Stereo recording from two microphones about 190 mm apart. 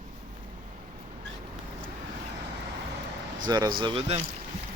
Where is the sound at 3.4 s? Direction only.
20° right (ahead or behind).